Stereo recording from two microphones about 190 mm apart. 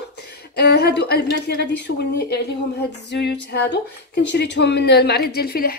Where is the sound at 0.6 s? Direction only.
60° left (ahead or behind).